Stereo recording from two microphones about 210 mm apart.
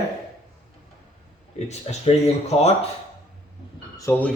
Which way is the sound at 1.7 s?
30° left (ahead or behind).